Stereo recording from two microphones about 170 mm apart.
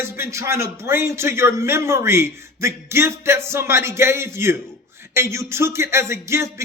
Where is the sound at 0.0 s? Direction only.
15° right (ahead or behind).